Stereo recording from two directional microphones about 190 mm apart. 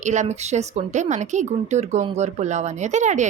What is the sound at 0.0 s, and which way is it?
A woman's voice, 40° right (ahead or behind).